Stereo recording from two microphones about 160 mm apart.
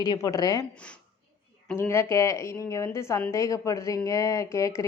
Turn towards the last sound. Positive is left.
turn(degrees=20)  # may be behind; listen again after turning